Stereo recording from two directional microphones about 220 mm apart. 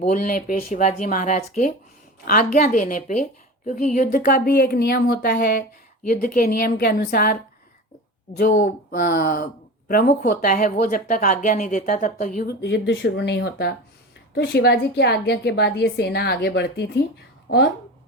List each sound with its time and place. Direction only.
0.0 s speech: 35° left (ahead or behind)
8.4 s a woman's voice: 35° left (ahead or behind)